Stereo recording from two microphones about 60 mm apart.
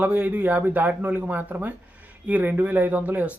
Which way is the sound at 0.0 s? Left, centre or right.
Right.